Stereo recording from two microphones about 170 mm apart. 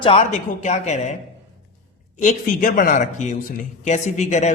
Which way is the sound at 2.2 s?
50° left (ahead or behind).